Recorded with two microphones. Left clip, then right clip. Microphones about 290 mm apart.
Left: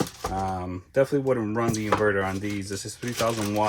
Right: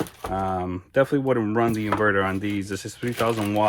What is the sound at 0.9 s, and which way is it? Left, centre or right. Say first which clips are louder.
Speech: right 2 dB; right.